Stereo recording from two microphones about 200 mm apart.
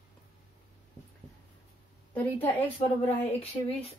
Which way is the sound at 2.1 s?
10° left (ahead or behind).